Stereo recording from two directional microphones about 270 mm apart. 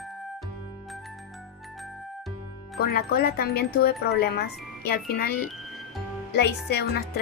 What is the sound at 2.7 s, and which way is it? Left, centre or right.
Speech, left.